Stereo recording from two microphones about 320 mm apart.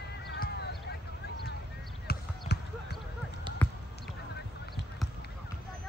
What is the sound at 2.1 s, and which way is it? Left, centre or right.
Basketball bounce, left.